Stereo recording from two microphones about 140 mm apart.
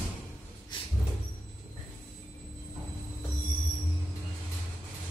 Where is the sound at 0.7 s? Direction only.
35° left (ahead or behind).